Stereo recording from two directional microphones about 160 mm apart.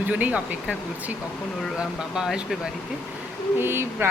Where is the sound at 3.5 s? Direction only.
15° right (ahead or behind).